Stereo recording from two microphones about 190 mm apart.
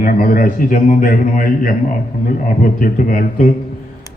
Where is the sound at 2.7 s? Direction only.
45° left (ahead or behind).